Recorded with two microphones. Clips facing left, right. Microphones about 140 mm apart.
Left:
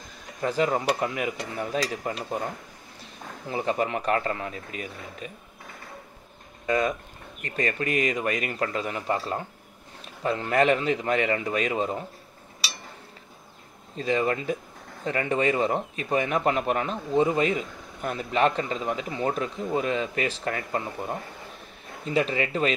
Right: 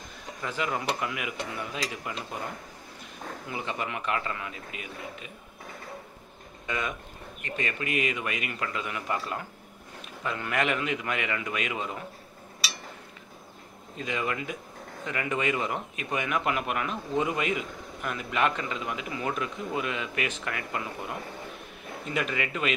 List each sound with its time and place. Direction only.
0.4 s speech: 40° left (ahead or behind)
3.4 s speech: 35° left (ahead or behind)
6.6 s speech: 35° left (ahead or behind)
13.9 s speech: 35° left (ahead or behind)